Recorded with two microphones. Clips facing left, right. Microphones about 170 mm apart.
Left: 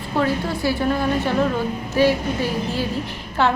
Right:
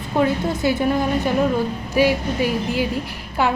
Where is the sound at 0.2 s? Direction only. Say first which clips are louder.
Right 2 dB; 20° right (ahead or behind).